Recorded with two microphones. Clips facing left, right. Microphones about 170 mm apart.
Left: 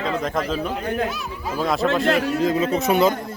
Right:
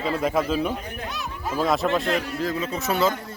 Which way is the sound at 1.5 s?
Centre (ahead or behind).